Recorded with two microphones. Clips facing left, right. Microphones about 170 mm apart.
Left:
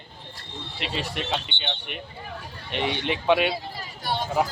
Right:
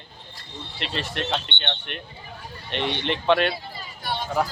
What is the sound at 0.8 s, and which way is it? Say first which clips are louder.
Speech: right 1 dB; 5° left (ahead or behind).